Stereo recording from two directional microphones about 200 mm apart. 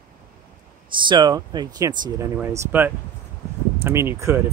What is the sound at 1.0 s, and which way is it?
Speech, 20° right (ahead or behind).